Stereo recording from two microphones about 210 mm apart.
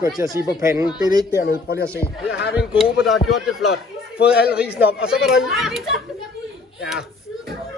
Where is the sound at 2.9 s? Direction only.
Centre (ahead or behind).